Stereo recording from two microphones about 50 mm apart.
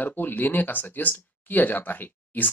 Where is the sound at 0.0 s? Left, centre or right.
Left.